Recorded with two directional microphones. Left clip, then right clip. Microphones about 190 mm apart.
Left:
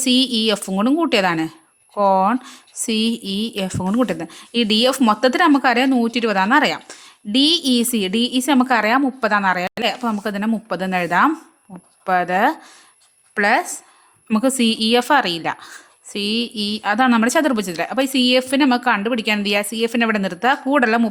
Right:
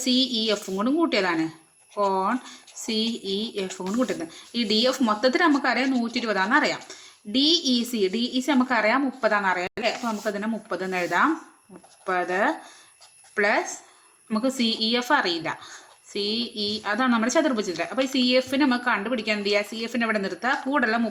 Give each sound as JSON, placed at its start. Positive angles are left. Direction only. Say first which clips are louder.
{"t": 0.0, "sound": "speech", "louder": "left 6 dB", "side_deg": 50}